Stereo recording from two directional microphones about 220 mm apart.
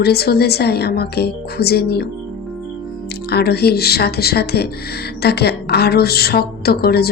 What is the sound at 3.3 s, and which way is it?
Speech, 45° left (ahead or behind).